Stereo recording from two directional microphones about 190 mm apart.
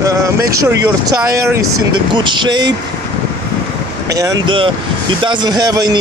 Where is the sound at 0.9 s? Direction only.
15° right (ahead or behind).